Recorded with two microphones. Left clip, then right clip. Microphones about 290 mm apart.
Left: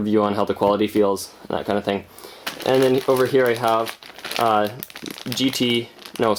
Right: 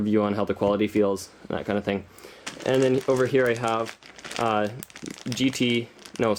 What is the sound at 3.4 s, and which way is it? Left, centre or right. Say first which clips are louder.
Speech: left 5 dB; centre.